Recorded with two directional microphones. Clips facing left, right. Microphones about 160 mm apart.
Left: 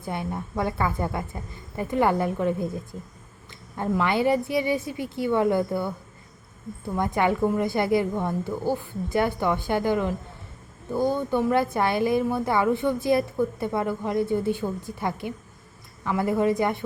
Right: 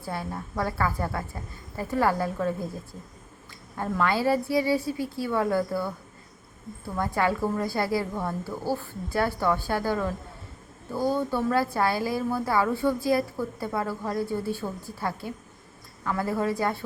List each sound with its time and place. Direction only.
0.0 s a woman's voice: 20° left (ahead or behind)
3.8 s a woman's voice: 20° left (ahead or behind)
6.9 s a woman's voice: 20° left (ahead or behind)